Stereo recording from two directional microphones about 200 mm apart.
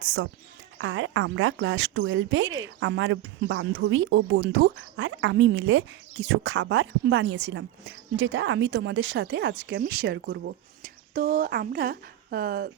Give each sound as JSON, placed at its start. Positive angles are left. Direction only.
{"t": 0.8, "sound": "speech", "side_deg": -70}
{"t": 11.1, "sound": "speech", "side_deg": -45}